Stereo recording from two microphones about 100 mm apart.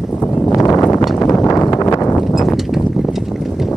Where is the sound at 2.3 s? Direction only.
Centre (ahead or behind).